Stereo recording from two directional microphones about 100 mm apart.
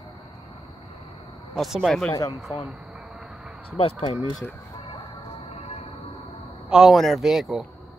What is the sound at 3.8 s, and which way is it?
Speech, 80° left.